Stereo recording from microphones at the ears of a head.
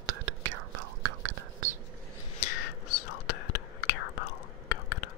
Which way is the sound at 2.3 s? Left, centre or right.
Left.